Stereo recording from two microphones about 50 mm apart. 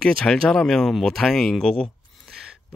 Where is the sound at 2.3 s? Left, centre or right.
Centre.